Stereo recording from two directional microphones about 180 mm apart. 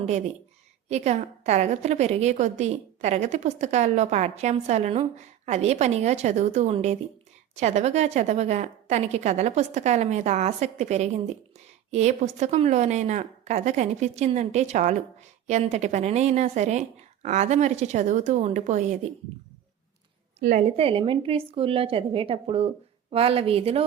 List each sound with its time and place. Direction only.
0.0 s a woman's voice: 40° right (ahead or behind)
20.4 s a woman's voice: 40° right (ahead or behind)